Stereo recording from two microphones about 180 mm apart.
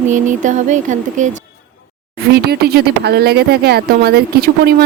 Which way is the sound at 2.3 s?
65° right (ahead or behind).